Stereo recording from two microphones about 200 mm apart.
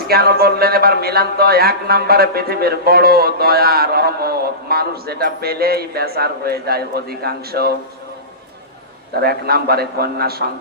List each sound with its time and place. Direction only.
0.1 s speech: 50° right (ahead or behind)
9.1 s speech: 50° right (ahead or behind)